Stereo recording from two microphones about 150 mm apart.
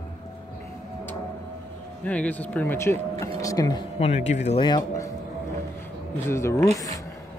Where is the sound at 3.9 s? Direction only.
45° left (ahead or behind).